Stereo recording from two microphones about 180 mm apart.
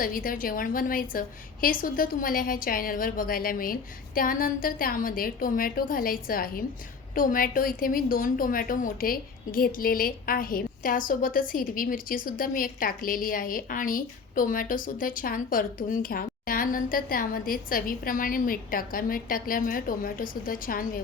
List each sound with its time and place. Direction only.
0.0 s a woman's voice: 50° left (ahead or behind)